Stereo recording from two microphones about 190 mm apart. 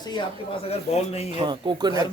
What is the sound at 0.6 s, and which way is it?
Speech, 35° left (ahead or behind).